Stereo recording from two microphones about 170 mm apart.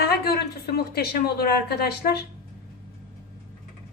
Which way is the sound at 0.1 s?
65° left (ahead or behind).